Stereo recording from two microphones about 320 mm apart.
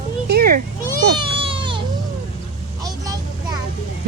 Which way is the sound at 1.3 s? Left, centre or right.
Centre.